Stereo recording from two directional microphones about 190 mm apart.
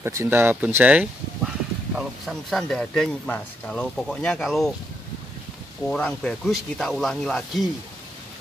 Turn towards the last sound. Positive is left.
turn(degrees=0)  # may be behind; listen again after turning